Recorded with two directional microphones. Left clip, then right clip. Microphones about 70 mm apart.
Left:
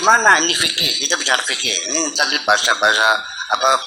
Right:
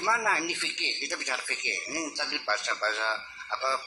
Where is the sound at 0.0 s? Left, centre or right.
Left.